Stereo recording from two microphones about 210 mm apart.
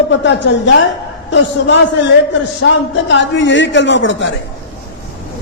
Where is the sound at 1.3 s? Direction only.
60° left (ahead or behind).